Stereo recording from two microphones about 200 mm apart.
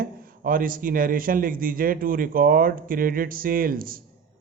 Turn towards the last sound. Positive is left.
turn(degrees=-45)  # may be behind; listen again after turning